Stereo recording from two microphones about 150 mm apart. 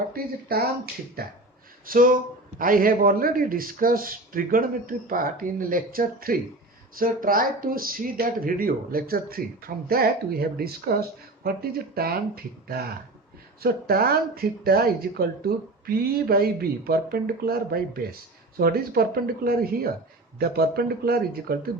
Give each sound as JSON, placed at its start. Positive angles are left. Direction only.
{"t": 0.1, "sound": "speech", "side_deg": -85}
{"t": 1.9, "sound": "a man's voice", "side_deg": -65}
{"t": 16.2, "sound": "speech", "side_deg": -90}